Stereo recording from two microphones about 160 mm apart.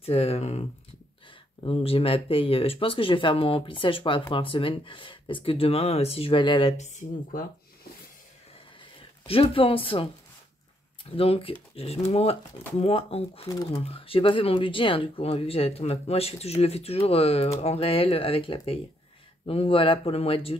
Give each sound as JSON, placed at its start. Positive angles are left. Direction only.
{"t": 0.0, "sound": "speech", "side_deg": 40}
{"t": 6.8, "sound": "speech", "side_deg": 55}
{"t": 9.2, "sound": "speech", "side_deg": 35}
{"t": 11.1, "sound": "speech", "side_deg": 35}